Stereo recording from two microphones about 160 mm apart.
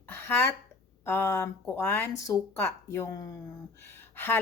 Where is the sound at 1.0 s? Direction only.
15° left (ahead or behind).